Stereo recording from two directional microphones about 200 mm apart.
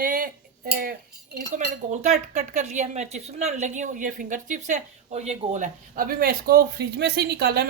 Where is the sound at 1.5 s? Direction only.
35° right (ahead or behind).